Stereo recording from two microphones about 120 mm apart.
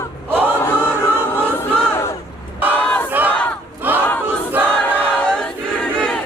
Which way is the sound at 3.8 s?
15° right (ahead or behind).